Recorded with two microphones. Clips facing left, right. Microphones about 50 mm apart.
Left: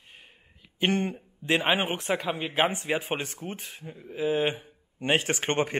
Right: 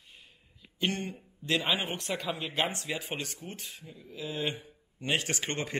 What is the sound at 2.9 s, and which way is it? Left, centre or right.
A man's voice, left.